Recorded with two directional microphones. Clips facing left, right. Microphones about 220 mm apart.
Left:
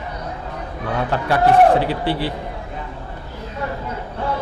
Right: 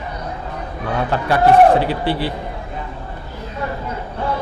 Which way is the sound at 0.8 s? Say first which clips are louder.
Right 1 dB; 20° right (ahead or behind).